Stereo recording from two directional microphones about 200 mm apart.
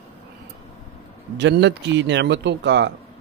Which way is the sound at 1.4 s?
60° right (ahead or behind).